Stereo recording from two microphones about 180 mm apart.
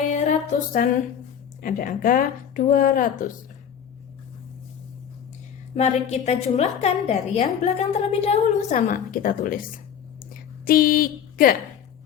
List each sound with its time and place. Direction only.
0.1 s music: 40° left (ahead or behind)
1.6 s a woman's voice: 50° left (ahead or behind)
5.7 s a woman's voice: 40° left (ahead or behind); by 11.5 s 55° left (ahead or behind)